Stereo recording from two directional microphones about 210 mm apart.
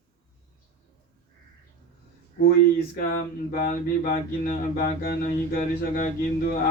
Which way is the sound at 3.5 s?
45° left (ahead or behind).